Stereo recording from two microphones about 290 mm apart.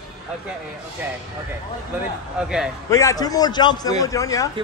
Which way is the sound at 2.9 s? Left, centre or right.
Centre.